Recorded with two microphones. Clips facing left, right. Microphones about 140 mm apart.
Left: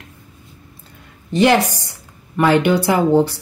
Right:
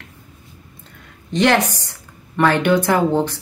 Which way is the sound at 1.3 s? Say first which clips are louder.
Left 2 dB; 10° left (ahead or behind).